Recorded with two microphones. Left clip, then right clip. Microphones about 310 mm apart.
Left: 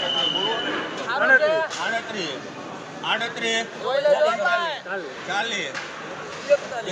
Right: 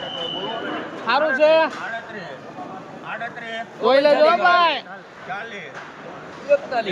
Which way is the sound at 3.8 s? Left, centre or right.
Right.